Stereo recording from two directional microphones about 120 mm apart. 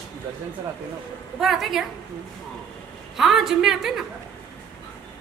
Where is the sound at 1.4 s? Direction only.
Centre (ahead or behind).